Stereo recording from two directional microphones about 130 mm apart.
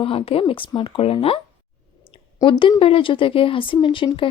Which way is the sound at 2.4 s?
40° left (ahead or behind).